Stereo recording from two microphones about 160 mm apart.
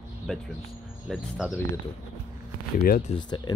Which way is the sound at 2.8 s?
60° left (ahead or behind).